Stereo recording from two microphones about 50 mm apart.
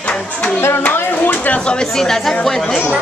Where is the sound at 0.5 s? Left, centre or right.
Left.